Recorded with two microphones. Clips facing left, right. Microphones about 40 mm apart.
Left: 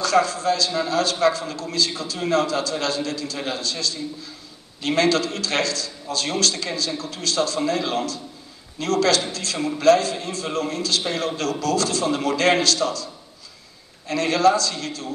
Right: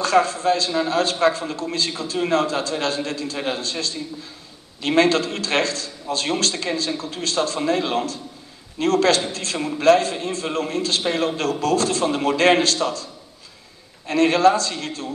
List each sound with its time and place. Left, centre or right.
0.0 s a man's voice: right